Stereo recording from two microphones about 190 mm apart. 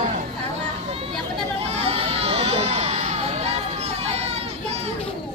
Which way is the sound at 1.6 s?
30° right (ahead or behind).